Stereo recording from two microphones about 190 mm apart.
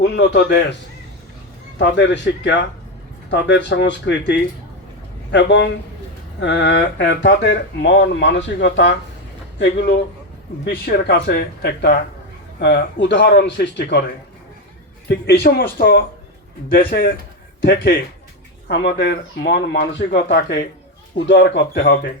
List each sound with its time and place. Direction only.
0.0 s speech: 65° left (ahead or behind)
1.8 s speech: 70° left (ahead or behind)
15.1 s speech: 55° left (ahead or behind)